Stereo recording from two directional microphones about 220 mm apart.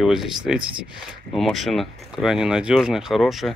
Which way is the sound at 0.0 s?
Centre (ahead or behind).